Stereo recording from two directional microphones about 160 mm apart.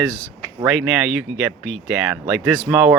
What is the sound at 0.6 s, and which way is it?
Speech, 5° right (ahead or behind).